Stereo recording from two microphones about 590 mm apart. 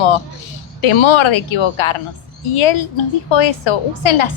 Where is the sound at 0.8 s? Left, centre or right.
Left.